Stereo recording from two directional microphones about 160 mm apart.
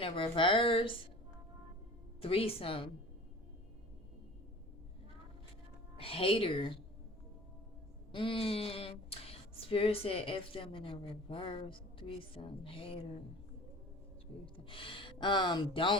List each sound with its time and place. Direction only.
0.0 s speech: 35° left (ahead or behind)
2.2 s speech: 35° left (ahead or behind)
6.0 s speech: 35° left (ahead or behind)
8.1 s speech: 35° left (ahead or behind)
14.4 s speech: 30° left (ahead or behind)